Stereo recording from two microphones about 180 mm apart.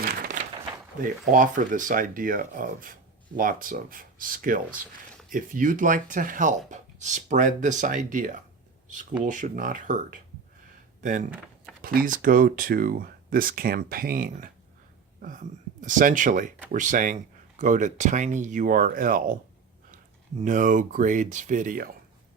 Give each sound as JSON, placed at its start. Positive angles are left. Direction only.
{"t": 0.0, "sound": "a sound", "side_deg": -55}
{"t": 1.0, "sound": "speech", "side_deg": -45}
{"t": 20.4, "sound": "speech", "side_deg": -45}